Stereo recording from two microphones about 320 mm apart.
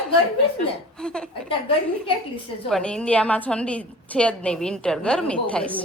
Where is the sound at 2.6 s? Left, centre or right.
Centre.